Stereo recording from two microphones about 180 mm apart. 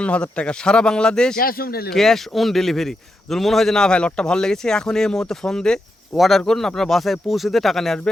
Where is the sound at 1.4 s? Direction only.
55° left (ahead or behind).